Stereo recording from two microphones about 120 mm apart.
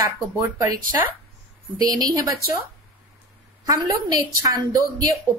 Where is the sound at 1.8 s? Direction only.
35° right (ahead or behind).